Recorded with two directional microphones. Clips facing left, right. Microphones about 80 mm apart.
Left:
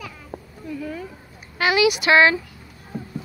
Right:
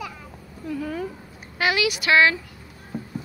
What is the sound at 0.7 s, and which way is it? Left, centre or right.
Speech, right.